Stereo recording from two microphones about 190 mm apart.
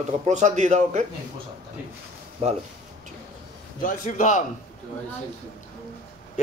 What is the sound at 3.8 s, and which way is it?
Speech, 45° left (ahead or behind).